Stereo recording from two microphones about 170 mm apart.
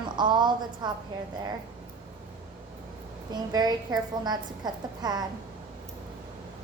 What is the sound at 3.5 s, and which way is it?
A woman's voice, 25° right (ahead or behind).